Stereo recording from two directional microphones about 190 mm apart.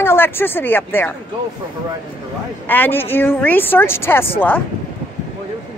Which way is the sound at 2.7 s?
10° left (ahead or behind).